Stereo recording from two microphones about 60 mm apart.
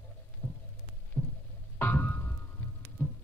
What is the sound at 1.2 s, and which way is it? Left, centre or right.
Heart sounds, centre.